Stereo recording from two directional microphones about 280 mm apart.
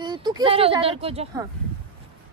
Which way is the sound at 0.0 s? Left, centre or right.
Centre.